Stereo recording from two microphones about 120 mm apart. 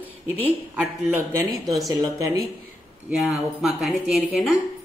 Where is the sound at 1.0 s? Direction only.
20° right (ahead or behind).